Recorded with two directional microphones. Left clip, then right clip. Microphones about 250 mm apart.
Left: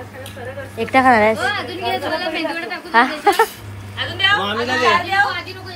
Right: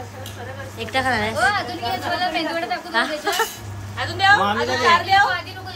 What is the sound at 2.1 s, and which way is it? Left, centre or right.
Speech, right.